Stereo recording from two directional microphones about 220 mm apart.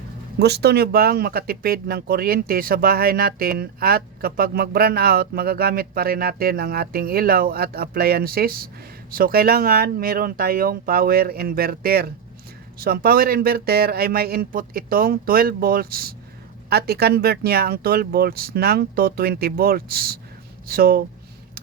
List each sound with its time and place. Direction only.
0.3 s speech: 50° right (ahead or behind)